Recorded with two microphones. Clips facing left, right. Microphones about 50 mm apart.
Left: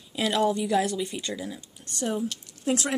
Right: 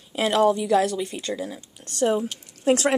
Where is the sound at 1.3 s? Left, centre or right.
Right.